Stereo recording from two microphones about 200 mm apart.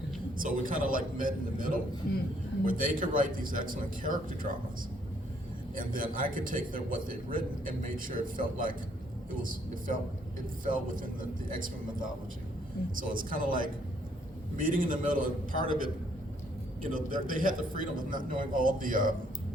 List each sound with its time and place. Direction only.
0.3 s a man's voice: 45° right (ahead or behind)
5.7 s a man's voice: 45° right (ahead or behind)